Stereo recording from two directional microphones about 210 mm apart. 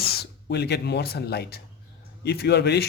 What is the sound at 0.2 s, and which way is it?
Speech, 50° left (ahead or behind).